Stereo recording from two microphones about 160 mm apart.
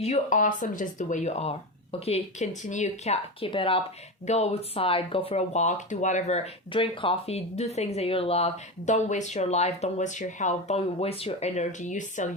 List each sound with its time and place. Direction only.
0.0 s speech: 45° left (ahead or behind)
8.9 s speech: 50° left (ahead or behind)